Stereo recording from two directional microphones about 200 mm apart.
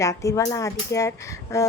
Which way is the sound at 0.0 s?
15° left (ahead or behind).